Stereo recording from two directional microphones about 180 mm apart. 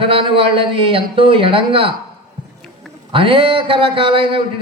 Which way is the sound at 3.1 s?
30° right (ahead or behind).